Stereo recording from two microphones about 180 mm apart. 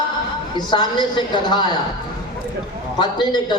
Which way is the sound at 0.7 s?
25° left (ahead or behind).